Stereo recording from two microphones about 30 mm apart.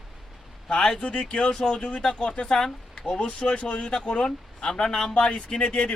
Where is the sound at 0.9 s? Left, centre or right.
Left.